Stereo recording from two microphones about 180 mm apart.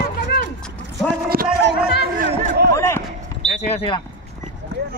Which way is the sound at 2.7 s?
15° left (ahead or behind).